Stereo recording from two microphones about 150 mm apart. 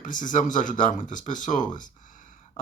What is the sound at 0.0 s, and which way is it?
Speech, 60° left (ahead or behind).